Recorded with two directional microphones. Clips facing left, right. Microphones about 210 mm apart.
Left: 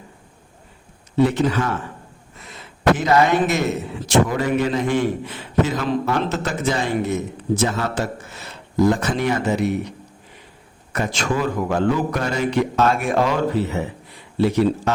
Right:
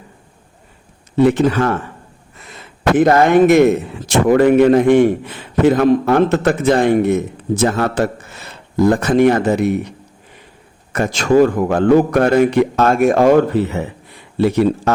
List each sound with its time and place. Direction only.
1.2 s a man's voice: 55° right (ahead or behind)
10.9 s a man's voice: 45° right (ahead or behind)